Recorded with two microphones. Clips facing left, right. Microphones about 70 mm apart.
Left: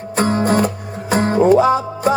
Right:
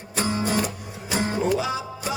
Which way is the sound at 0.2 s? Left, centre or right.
Left.